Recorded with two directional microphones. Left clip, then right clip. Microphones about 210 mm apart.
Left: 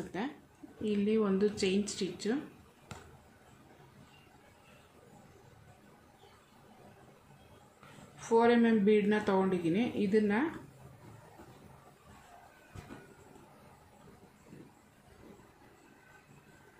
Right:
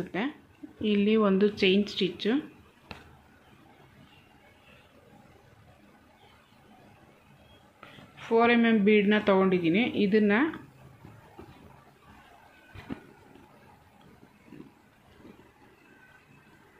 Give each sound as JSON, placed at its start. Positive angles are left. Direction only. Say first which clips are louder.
{"t": 0.1, "sound": "a sound", "louder": "right 7 dB", "side_deg": -30}
{"t": 0.8, "sound": "speech", "louder": "right 6 dB", "side_deg": -35}
{"t": 8.2, "sound": "speech", "louder": "right 3 dB", "side_deg": -30}